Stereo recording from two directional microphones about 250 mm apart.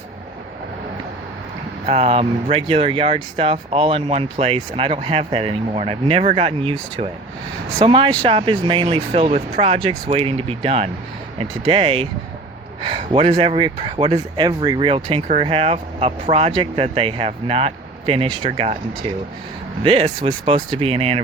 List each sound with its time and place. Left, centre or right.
1.9 s speech: right